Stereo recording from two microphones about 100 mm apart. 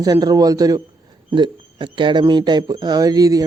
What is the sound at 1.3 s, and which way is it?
Speech, 55° right (ahead or behind).